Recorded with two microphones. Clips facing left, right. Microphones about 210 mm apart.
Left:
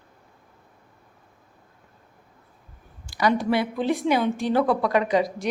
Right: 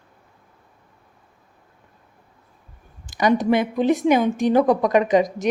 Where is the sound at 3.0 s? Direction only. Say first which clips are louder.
Right 4 dB; 20° right (ahead or behind).